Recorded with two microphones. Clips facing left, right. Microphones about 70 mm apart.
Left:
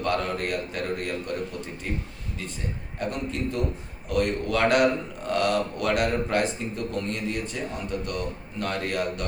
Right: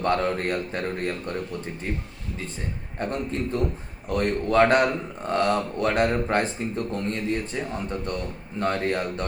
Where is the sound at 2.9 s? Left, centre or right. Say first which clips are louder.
Right 2 dB; right.